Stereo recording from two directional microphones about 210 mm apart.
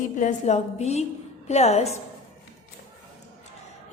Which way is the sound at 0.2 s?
35° left (ahead or behind).